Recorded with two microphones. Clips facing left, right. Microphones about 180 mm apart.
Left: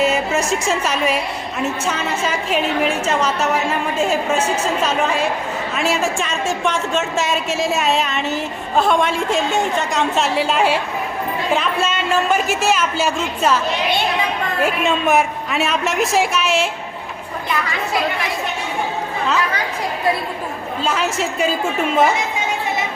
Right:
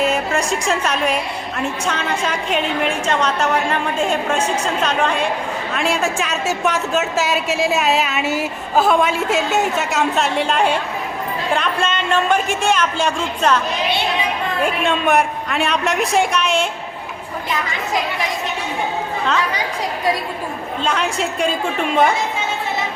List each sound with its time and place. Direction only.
0.0 s a woman's voice: 5° left (ahead or behind)
14.6 s a woman's voice: centre (ahead or behind)
20.8 s a woman's voice: 5° left (ahead or behind)